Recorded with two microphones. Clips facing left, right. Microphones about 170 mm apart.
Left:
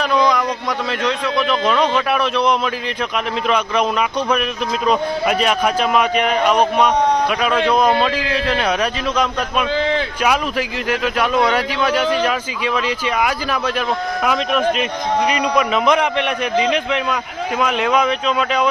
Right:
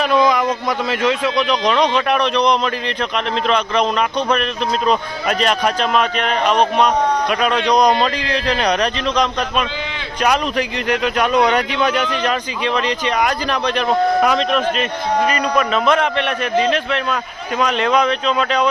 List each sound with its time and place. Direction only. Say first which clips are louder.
0.0 s a sound: right 1 dB; centre (ahead or behind)
0.9 s a man's voice: right 3 dB; 5° right (ahead or behind)
4.9 s a man's voice: left 5 dB; 5° left (ahead or behind)